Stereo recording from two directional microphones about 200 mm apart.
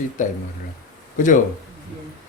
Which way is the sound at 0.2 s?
40° left (ahead or behind).